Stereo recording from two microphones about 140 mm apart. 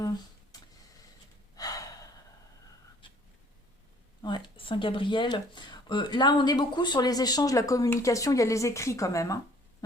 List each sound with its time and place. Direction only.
0.5 s vehicle: 25° left (ahead or behind)
1.5 s gasp: 25° left (ahead or behind)
3.0 s a sound: 35° left (ahead or behind)
4.2 s speech: 30° left (ahead or behind)